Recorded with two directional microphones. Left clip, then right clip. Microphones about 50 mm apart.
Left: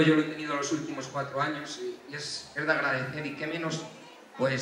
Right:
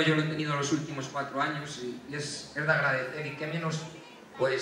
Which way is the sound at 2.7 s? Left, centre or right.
Left.